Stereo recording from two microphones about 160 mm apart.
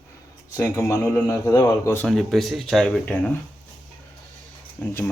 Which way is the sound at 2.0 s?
Centre (ahead or behind).